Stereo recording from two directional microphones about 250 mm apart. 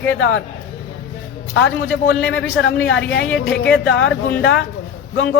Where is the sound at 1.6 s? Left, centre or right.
Left.